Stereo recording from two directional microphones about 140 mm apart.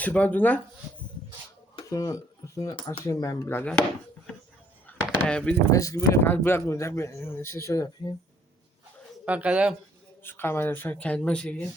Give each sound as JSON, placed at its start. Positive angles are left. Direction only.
{"t": 0.0, "sound": "speech", "side_deg": 10}
{"t": 1.9, "sound": "speech", "side_deg": 25}
{"t": 2.7, "sound": "speech", "side_deg": 40}
{"t": 3.0, "sound": "speech", "side_deg": 20}
{"t": 4.9, "sound": "a sound", "side_deg": 10}
{"t": 5.7, "sound": "speech", "side_deg": 25}
{"t": 9.2, "sound": "speech", "side_deg": -10}
{"t": 10.2, "sound": "speech", "side_deg": 15}